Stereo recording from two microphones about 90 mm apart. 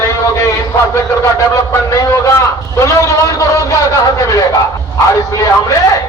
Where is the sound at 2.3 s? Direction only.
30° left (ahead or behind).